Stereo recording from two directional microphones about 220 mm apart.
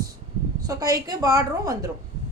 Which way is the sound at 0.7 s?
15° right (ahead or behind).